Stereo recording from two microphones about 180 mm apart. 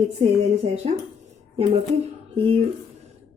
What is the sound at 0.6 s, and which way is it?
Speech, 35° right (ahead or behind).